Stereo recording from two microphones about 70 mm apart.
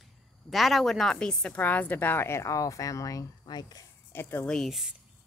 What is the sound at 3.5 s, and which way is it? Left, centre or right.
Speech, left.